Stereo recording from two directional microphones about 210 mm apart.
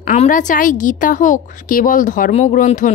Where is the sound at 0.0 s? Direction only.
35° left (ahead or behind).